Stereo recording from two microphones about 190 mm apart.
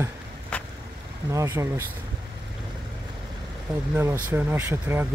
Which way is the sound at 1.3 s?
15° right (ahead or behind).